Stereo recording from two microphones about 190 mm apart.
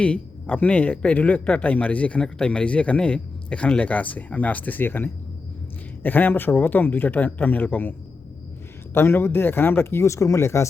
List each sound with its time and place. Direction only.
0.0 s a man's voice: 5° left (ahead or behind)